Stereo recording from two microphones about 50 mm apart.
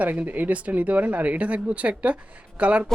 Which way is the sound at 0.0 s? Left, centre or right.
Right.